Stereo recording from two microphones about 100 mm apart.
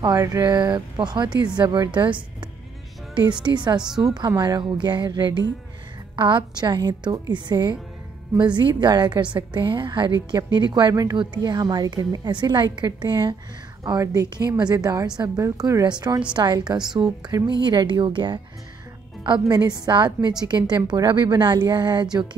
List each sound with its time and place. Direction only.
0.0 s a woman's voice: 40° right (ahead or behind)
3.4 s a woman's voice: 50° right (ahead or behind)
19.4 s a woman's voice: 40° right (ahead or behind)